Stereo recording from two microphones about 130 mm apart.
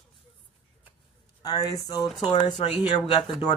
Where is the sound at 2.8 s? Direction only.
35° left (ahead or behind).